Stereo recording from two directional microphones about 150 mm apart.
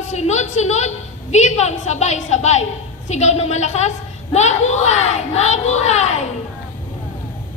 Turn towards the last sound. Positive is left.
turn(degrees=50)  # may be behind; listen again after turning